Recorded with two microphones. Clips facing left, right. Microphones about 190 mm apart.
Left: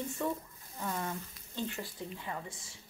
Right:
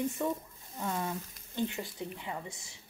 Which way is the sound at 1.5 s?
15° right (ahead or behind).